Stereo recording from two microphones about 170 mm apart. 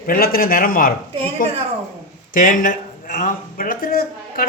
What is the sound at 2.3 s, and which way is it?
Speech, 50° left (ahead or behind).